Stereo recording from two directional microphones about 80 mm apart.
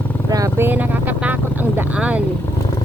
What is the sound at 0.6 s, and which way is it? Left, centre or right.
Vehicle, right.